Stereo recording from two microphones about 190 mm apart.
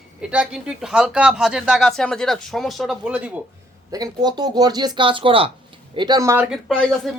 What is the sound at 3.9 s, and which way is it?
Speech, 20° right (ahead or behind).